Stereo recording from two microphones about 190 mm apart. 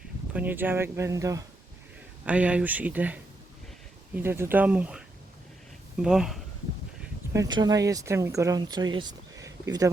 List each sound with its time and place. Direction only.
0.3 s speech: 10° right (ahead or behind)
2.2 s speech: 5° right (ahead or behind)
7.3 s speech: 20° right (ahead or behind)